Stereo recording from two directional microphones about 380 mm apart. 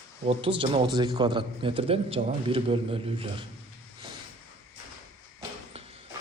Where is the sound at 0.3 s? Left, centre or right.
Centre.